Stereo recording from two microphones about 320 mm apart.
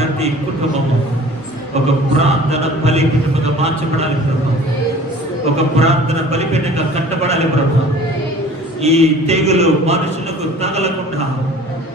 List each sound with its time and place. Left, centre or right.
2.1 s a man's voice: centre
5.8 s a man's voice: centre
8.8 s a man's voice: centre